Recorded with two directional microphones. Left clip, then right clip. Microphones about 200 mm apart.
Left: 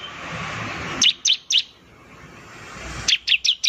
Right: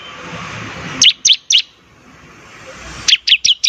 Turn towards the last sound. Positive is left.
turn(degrees=-30)  # may be behind; listen again after turning